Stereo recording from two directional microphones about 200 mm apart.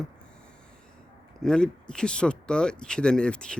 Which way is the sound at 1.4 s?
5° left (ahead or behind).